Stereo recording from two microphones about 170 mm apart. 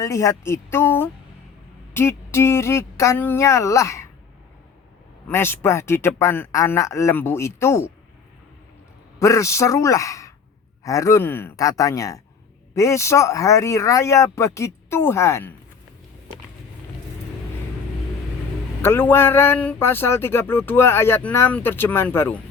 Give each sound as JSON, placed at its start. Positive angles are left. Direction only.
{"t": 0.0, "sound": "speech", "side_deg": 15}
{"t": 5.3, "sound": "speech", "side_deg": 15}
{"t": 9.1, "sound": "speech", "side_deg": 20}
{"t": 18.8, "sound": "speech", "side_deg": 15}